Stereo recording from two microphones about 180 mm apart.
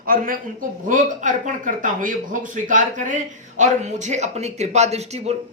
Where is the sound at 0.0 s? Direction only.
50° right (ahead or behind).